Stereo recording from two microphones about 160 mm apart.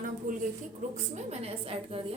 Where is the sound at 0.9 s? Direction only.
40° right (ahead or behind).